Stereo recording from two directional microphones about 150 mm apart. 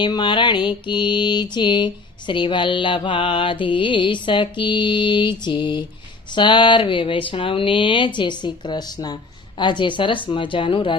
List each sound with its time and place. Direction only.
0.0 s mantra: 30° left (ahead or behind)